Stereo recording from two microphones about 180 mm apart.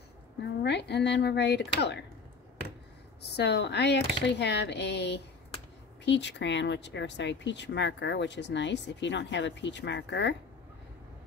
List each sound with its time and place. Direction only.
0.4 s speech: 70° left (ahead or behind)
3.2 s speech: 65° left (ahead or behind)